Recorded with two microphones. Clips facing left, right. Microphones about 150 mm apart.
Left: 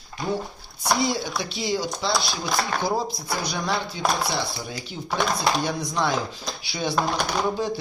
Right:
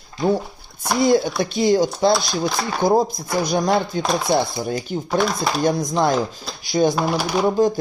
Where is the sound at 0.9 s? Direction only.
50° right (ahead or behind).